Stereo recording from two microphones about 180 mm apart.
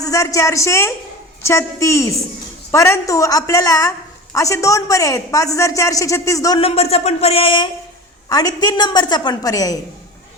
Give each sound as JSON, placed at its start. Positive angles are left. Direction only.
{"t": 0.0, "sound": "a woman's voice", "side_deg": 20}
{"t": 6.6, "sound": "a woman's voice", "side_deg": 35}